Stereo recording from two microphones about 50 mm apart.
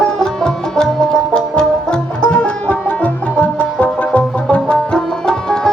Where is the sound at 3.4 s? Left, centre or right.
Left.